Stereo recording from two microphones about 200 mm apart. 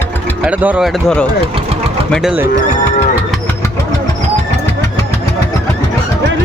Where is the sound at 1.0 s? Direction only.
5° left (ahead or behind).